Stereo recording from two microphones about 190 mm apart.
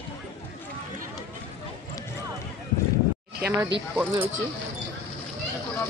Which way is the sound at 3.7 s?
65° right (ahead or behind).